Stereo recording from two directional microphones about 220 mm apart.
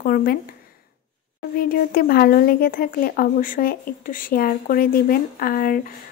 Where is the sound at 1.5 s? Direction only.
40° left (ahead or behind).